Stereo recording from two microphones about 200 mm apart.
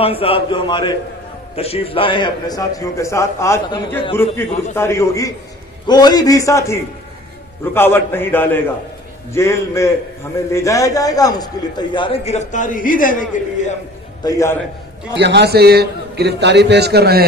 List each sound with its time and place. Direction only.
0.0 s a man's voice: 30° left (ahead or behind)
14.2 s a man's voice: 15° left (ahead or behind)
15.1 s a man's voice: 60° right (ahead or behind)